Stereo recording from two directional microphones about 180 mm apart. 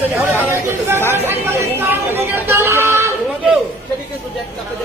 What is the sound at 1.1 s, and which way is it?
Chatter, 10° right (ahead or behind).